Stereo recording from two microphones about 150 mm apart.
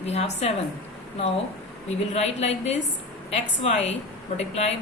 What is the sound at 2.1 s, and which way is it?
A woman's voice, 45° left (ahead or behind).